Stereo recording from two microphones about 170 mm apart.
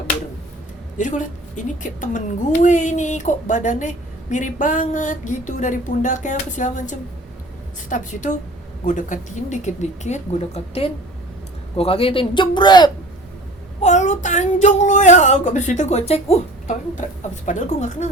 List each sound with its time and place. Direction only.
0.9 s a woman's voice: 45° left (ahead or behind); by 12.9 s 25° left (ahead or behind)
13.8 s a woman's voice: 45° left (ahead or behind)